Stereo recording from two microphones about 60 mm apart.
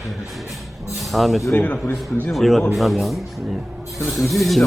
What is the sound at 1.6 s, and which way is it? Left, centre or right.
Speech, left.